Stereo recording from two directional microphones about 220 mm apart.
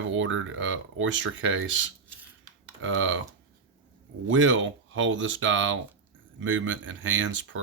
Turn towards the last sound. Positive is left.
turn(degrees=-60)  # may be behind; listen again after turning